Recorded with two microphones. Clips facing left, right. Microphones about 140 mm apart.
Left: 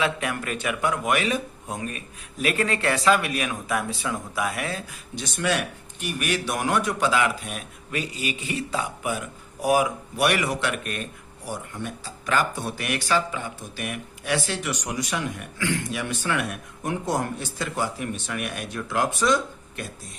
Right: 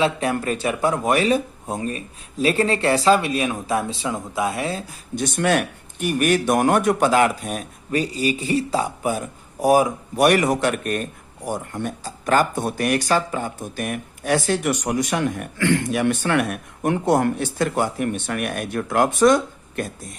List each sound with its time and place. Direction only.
0.0 s speech: 35° right (ahead or behind)
5.1 s speech: 50° right (ahead or behind)